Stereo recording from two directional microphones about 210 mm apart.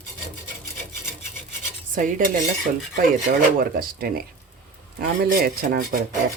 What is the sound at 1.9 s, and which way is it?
Cutlery, 40° right (ahead or behind).